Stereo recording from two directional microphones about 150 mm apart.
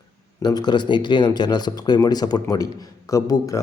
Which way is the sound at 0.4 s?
30° left (ahead or behind).